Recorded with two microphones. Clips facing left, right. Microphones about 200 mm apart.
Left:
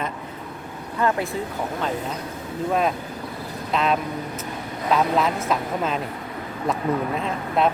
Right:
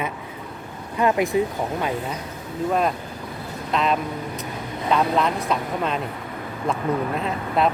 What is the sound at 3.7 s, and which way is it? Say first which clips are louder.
Speech: even; centre (ahead or behind).